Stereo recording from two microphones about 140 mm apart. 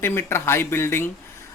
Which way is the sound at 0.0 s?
15° left (ahead or behind).